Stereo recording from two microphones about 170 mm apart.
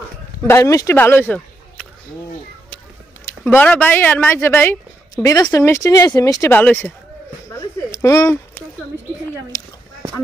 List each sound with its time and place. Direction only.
0.4 s speech: 15° left (ahead or behind)
3.4 s speech: 10° left (ahead or behind)
7.9 s speech: 15° left (ahead or behind)